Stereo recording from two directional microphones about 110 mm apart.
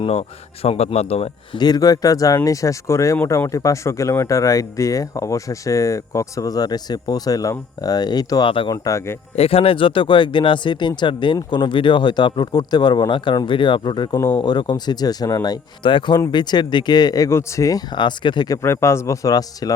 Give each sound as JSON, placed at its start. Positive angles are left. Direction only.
{"t": 0.0, "sound": "speech", "side_deg": 65}
{"t": 1.5, "sound": "speech", "side_deg": 40}
{"t": 8.4, "sound": "speech", "side_deg": 50}
{"t": 8.7, "sound": "speech", "side_deg": 30}
{"t": 9.3, "sound": "speech", "side_deg": 60}
{"t": 15.8, "sound": "speech", "side_deg": 50}